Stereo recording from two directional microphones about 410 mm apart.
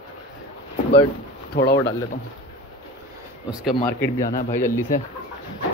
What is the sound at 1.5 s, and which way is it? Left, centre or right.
Speech, left.